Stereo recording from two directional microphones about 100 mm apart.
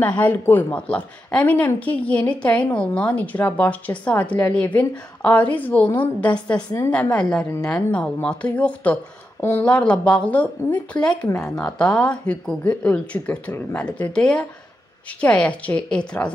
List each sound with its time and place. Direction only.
0.0 s speech: 15° left (ahead or behind)